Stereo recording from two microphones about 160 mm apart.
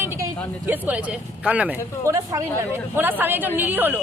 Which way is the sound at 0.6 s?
10° right (ahead or behind).